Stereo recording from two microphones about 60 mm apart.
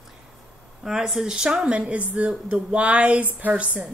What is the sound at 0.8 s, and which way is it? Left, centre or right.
Speech, centre.